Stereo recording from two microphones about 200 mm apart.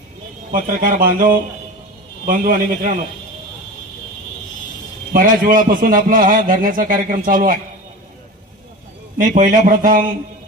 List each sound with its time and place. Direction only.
0.5 s a man's voice: 45° right (ahead or behind)
5.1 s a man's voice: 45° right (ahead or behind)
9.2 s a man's voice: 40° right (ahead or behind)